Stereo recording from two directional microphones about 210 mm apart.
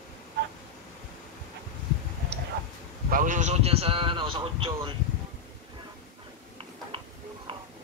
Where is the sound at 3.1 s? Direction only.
40° right (ahead or behind).